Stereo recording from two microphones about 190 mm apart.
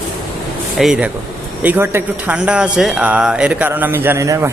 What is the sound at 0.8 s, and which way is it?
Speech, 5° right (ahead or behind).